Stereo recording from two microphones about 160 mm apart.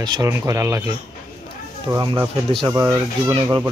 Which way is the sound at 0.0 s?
20° right (ahead or behind).